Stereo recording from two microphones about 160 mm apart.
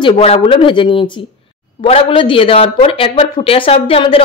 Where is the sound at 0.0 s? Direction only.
35° left (ahead or behind).